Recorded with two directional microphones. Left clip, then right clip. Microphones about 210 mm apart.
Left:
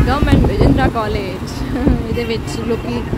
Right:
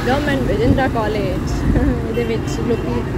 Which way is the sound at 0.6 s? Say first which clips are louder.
Left 2 dB; 15° left (ahead or behind).